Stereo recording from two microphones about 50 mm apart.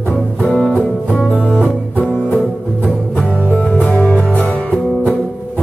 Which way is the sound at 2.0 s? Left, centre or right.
Left.